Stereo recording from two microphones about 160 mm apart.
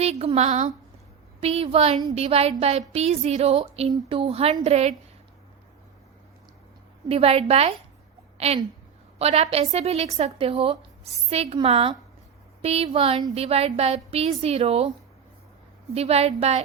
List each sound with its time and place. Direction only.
0.0 s a woman's voice: 40° right (ahead or behind)
7.1 s a woman's voice: 40° right (ahead or behind)
16.0 s a woman's voice: 40° right (ahead or behind)